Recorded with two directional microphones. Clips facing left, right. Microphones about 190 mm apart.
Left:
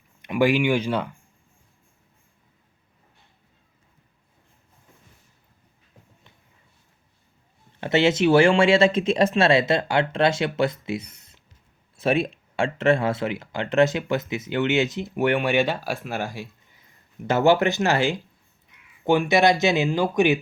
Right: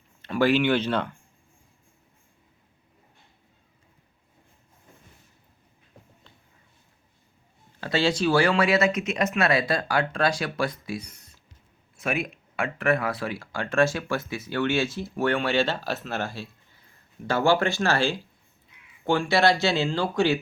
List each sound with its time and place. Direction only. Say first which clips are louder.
0.2 s speech: left 1 dB; 15° left (ahead or behind)
7.8 s speech: left 5 dB; 20° left (ahead or behind)